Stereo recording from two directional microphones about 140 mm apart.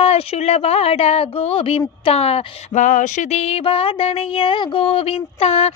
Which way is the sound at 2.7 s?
65° left (ahead or behind).